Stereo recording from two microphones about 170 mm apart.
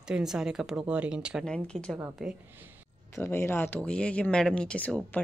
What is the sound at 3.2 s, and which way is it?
A woman's voice, 15° left (ahead or behind).